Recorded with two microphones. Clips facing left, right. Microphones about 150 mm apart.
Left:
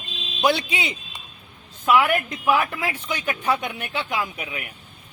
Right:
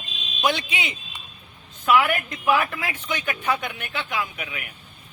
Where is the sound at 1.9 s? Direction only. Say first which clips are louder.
Left 1 dB; 20° left (ahead or behind).